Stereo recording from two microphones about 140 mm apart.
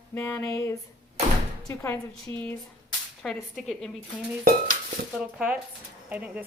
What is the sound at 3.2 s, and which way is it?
Speech, centre (ahead or behind).